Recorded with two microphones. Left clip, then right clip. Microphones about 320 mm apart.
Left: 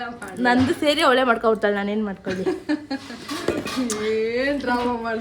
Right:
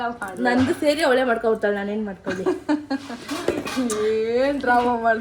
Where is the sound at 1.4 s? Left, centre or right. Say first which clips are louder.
Left 1 dB; centre.